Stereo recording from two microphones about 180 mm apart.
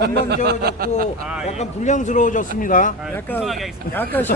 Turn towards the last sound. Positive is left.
turn(degrees=10)  # may be behind; listen again after turning